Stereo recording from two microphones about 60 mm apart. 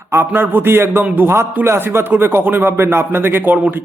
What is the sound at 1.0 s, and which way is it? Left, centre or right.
Speech, right.